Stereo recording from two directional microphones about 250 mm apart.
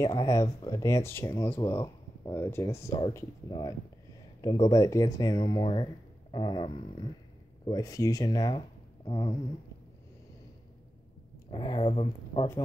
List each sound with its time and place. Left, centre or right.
0.0 s speech: centre
11.5 s speech: left